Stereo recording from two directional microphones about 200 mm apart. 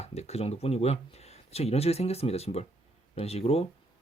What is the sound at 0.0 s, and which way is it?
Speech, 30° left (ahead or behind).